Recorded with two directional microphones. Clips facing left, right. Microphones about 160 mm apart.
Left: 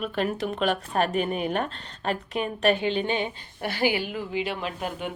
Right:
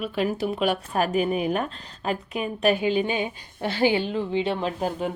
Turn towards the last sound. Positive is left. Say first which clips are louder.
# right 5 dB
turn(degrees=-35)  # may be behind; listen again after turning